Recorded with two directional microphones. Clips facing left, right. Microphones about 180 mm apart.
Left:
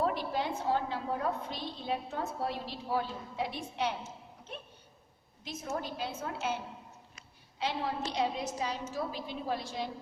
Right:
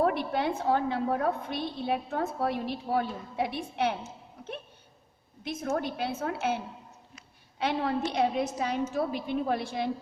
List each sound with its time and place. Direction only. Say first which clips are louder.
0.0 s a woman's voice: right 5 dB; 60° right (ahead or behind)
5.4 s a woman's voice: right 7 dB; 55° right (ahead or behind)
7.6 s a woman's voice: right 6 dB; 60° right (ahead or behind)